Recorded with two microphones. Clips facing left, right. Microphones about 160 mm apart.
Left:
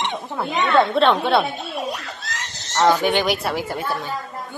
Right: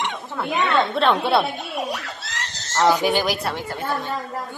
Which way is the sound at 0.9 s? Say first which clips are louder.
Left 2 dB; centre (ahead or behind).